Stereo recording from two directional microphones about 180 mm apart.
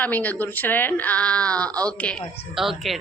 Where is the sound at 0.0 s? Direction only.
10° left (ahead or behind).